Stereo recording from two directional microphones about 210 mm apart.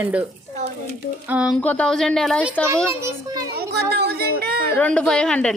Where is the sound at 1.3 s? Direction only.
5° right (ahead or behind).